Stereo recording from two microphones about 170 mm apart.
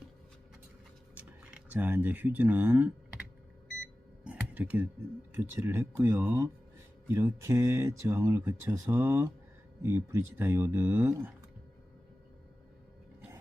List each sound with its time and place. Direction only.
1.7 s speech: 10° right (ahead or behind)
4.2 s chink: 5° right (ahead or behind)
5.3 s speech: 15° right (ahead or behind)